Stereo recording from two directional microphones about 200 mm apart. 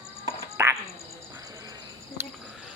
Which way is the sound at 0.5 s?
15° right (ahead or behind).